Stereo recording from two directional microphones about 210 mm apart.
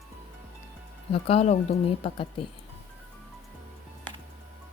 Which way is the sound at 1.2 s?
30° left (ahead or behind).